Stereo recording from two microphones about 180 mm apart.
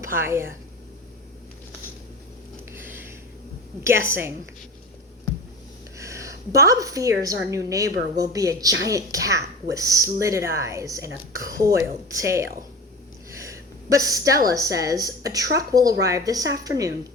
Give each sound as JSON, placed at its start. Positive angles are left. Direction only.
{"t": 0.0, "sound": "speech", "side_deg": -15}
{"t": 2.7, "sound": "a sound", "side_deg": -10}
{"t": 3.8, "sound": "speech", "side_deg": -15}
{"t": 6.0, "sound": "a woman's voice", "side_deg": -15}